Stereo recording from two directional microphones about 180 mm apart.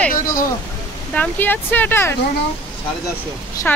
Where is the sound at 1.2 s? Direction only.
10° left (ahead or behind).